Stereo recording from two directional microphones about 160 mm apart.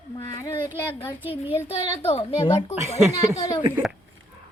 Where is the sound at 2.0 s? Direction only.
40° left (ahead or behind).